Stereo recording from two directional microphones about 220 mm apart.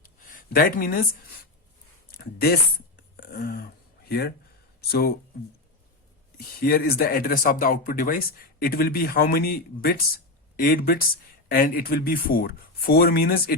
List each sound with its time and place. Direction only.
0.5 s speech: 40° left (ahead or behind)
2.0 s speech: 45° left (ahead or behind)
3.2 s a sound: 45° left (ahead or behind)
4.8 s speech: 45° left (ahead or behind)
6.3 s speech: 45° left (ahead or behind)